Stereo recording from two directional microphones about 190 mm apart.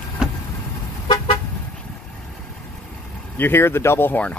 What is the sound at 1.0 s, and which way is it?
Vehicle, 25° left (ahead or behind).